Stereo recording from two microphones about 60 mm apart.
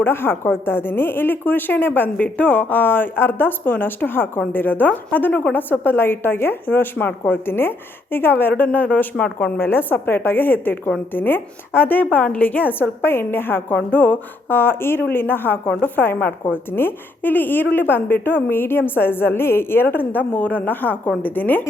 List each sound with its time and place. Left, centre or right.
0.0 s a woman's voice: left; by 9.5 s centre
9.6 s a woman's voice: left